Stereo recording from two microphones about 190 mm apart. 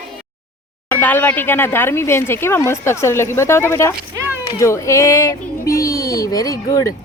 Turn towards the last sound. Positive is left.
turn(degrees=20)  # may be behind; listen again after turning